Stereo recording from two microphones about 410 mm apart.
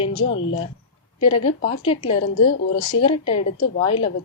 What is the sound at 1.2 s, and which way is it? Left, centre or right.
Speech, centre.